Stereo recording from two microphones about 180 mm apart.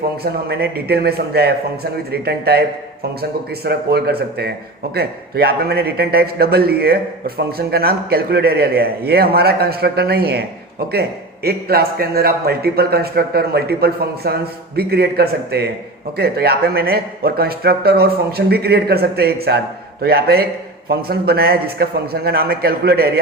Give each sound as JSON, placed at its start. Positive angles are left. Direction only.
{"t": 0.2, "sound": "a man's voice", "side_deg": -60}
{"t": 11.4, "sound": "a man's voice", "side_deg": -60}